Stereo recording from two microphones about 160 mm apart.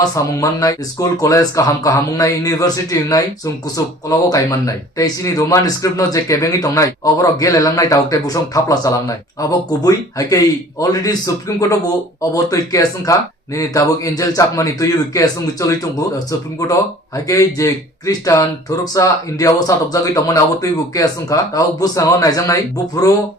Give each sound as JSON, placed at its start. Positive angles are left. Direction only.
{"t": 0.0, "sound": "speech", "side_deg": 20}